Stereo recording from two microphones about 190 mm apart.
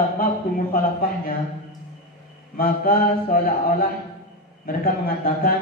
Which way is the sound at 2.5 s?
50° left (ahead or behind).